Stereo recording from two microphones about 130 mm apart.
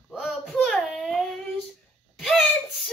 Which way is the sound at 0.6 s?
5° left (ahead or behind).